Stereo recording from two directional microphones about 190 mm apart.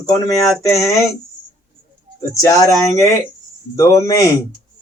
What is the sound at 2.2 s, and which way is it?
Speech, 15° left (ahead or behind).